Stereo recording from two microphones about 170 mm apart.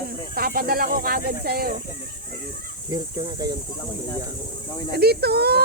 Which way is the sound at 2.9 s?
25° right (ahead or behind).